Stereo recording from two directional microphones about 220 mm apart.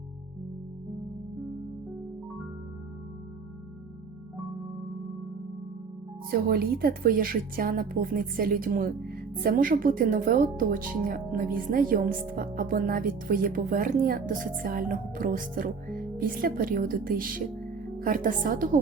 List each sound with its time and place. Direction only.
6.3 s speech: 45° right (ahead or behind)